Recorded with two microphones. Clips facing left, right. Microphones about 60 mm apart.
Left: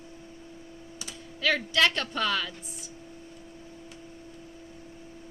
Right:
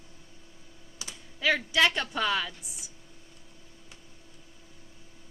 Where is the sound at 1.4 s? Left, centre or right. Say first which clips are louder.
Even; centre.